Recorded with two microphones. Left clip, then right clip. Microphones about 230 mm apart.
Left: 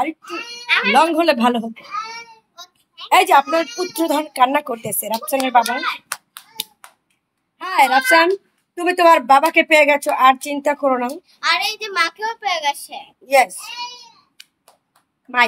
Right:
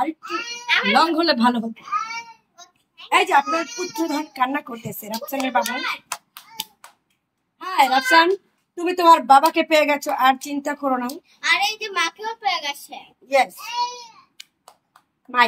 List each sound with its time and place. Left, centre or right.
0.7 s speech: centre
2.5 s a sound: left
3.5 s a child's voice: centre
3.9 s speech: left
6.0 s hands: centre
7.5 s a child's voice: left
13.7 s babbling: centre